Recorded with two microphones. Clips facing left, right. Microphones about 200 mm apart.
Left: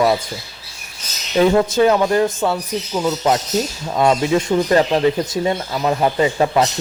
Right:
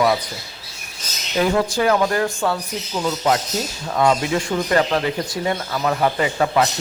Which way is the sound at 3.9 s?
20° left (ahead or behind).